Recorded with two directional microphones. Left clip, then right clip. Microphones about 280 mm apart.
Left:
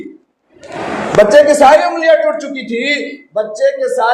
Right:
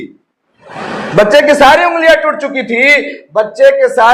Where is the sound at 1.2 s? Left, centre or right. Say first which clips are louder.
Even; right.